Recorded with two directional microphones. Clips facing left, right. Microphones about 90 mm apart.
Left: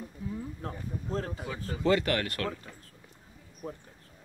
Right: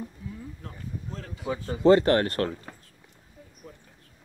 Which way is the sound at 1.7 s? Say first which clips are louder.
Right 8 dB; 35° right (ahead or behind).